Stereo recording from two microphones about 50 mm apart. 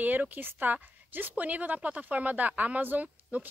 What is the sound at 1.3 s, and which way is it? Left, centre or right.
A woman's voice, right.